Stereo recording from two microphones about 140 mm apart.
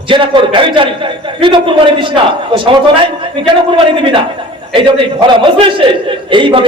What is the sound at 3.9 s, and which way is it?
Speech, 40° right (ahead or behind).